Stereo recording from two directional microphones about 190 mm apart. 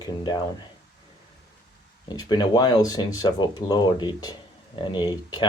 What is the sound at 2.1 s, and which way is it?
Speech, 25° left (ahead or behind).